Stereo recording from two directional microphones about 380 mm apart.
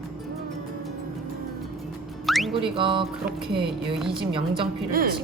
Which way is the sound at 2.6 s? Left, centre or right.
Centre.